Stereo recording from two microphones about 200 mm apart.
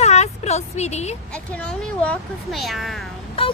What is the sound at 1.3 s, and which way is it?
Speech, 5° left (ahead or behind).